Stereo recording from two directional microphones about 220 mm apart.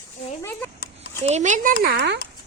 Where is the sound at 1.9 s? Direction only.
50° right (ahead or behind).